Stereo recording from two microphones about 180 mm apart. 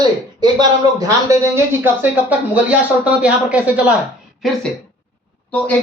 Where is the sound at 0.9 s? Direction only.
20° right (ahead or behind).